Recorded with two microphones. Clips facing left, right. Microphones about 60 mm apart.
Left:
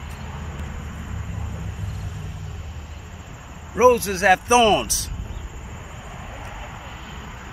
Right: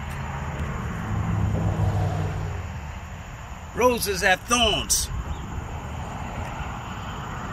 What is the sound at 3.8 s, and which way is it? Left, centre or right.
Speech, centre.